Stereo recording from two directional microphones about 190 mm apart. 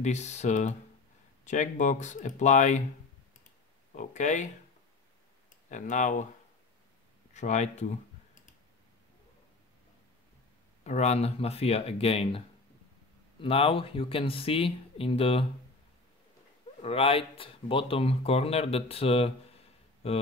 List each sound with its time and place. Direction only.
0.0 s speech: 35° left (ahead or behind)
3.9 s speech: 40° left (ahead or behind)
5.7 s speech: 40° left (ahead or behind)
7.3 s speech: 40° left (ahead or behind)
10.8 s speech: 35° left (ahead or behind)
16.8 s speech: 30° left (ahead or behind)